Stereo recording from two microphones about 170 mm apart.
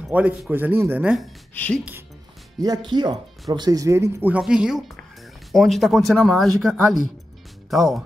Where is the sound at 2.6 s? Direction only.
25° right (ahead or behind).